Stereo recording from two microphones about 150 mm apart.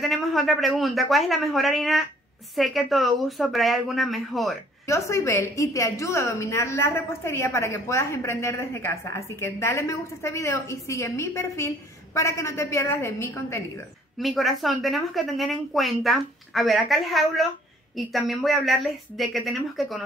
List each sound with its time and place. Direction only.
0.0 s a woman's voice: centre (ahead or behind)
4.8 s a woman's voice: 20° left (ahead or behind)
14.1 s a woman's voice: centre (ahead or behind)